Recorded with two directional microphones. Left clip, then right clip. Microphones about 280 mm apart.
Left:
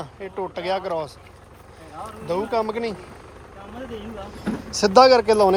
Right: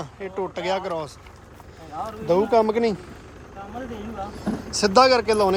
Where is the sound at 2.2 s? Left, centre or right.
Centre.